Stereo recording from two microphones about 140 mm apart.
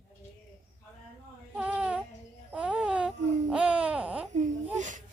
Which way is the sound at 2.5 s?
5° right (ahead or behind).